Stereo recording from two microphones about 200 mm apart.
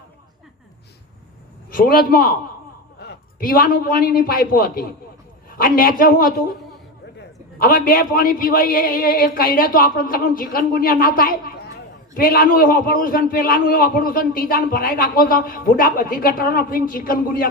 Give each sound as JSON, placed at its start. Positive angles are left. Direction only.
{"t": 1.7, "sound": "a man's voice", "side_deg": 45}